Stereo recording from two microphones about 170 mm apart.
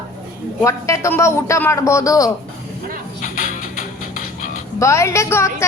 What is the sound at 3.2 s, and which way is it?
Music, 55° left (ahead or behind).